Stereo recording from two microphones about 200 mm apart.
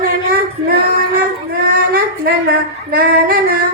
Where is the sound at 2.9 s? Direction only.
50° right (ahead or behind).